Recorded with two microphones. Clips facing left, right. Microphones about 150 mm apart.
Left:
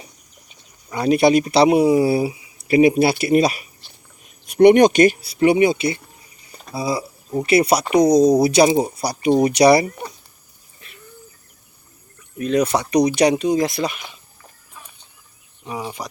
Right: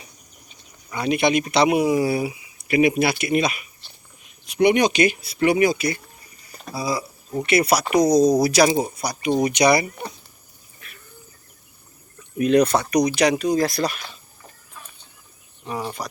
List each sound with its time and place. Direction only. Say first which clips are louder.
0.9 s speech: left 5 dB; 35° left (ahead or behind)
5.3 s speech: left 3 dB; 30° left (ahead or behind)
6.5 s a sound: left 2 dB; 25° left (ahead or behind)
7.4 s speech: left 3 dB; 30° left (ahead or behind)
12.5 s speech: left 1 dB; 10° left (ahead or behind)
15.6 s speech: even; 5° left (ahead or behind)